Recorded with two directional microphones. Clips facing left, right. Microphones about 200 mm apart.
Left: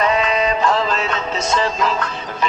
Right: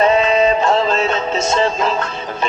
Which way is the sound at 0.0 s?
25° right (ahead or behind).